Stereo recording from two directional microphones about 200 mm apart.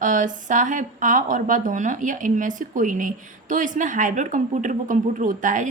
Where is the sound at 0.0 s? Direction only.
40° right (ahead or behind).